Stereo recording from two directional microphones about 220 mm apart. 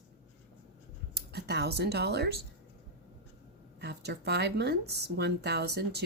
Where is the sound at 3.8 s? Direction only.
50° right (ahead or behind).